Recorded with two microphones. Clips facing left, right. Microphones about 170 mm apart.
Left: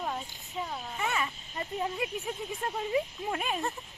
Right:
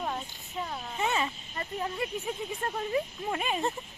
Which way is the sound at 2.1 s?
Centre (ahead or behind).